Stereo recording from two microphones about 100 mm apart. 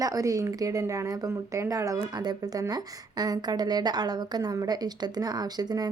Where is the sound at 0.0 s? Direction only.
35° right (ahead or behind).